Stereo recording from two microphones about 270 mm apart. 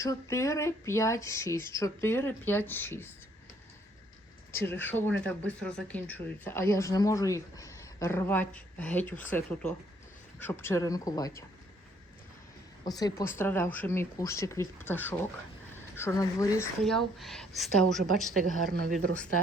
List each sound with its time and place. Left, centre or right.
0.0 s speech: centre
4.5 s a woman's voice: centre
12.8 s speech: centre
16.8 s a woman's voice: centre
18.7 s speech: right
18.9 s a woman's voice: centre